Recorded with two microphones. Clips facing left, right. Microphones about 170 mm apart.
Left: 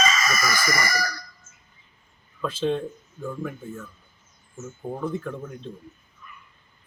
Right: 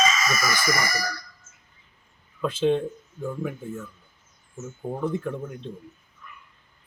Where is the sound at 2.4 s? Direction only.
15° right (ahead or behind).